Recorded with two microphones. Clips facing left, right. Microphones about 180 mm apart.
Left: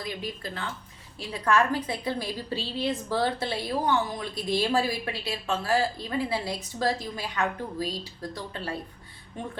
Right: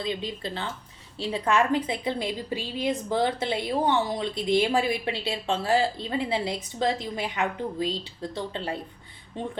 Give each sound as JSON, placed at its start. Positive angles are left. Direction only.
{"t": 0.0, "sound": "a woman's voice", "side_deg": -25}